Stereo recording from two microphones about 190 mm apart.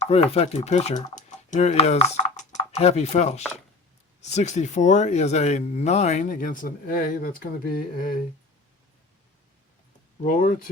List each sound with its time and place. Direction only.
0.0 s speech: 35° left (ahead or behind); by 8.1 s 50° left (ahead or behind)
10.2 s speech: 45° left (ahead or behind)